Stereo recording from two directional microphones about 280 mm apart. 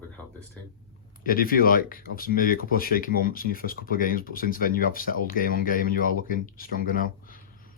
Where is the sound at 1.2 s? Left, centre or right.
Left.